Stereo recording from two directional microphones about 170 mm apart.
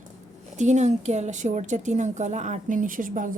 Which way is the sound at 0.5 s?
45° right (ahead or behind).